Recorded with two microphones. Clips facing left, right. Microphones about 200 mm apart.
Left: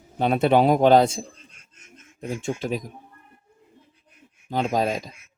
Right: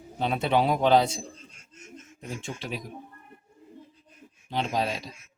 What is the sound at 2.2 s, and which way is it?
Speech, 50° left (ahead or behind).